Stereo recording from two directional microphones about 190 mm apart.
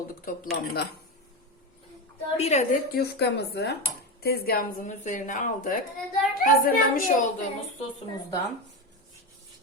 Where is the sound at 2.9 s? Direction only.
60° left (ahead or behind).